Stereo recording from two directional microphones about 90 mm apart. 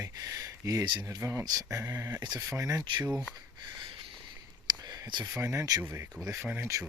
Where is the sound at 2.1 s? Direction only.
55° right (ahead or behind).